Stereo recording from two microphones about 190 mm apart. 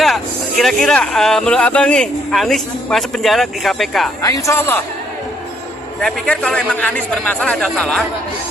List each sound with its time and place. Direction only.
0.0 s speech: centre (ahead or behind)
4.2 s speech: 15° left (ahead or behind)
6.0 s speech: 5° left (ahead or behind)